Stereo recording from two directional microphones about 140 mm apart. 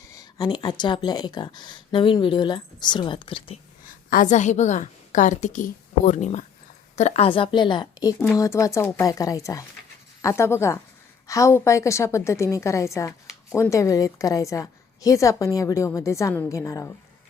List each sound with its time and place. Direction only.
0.1 s speech: 30° left (ahead or behind)
3.8 s a woman's voice: 70° left (ahead or behind); by 8.1 s 30° left (ahead or behind)
8.2 s a woman's voice: 20° left (ahead or behind)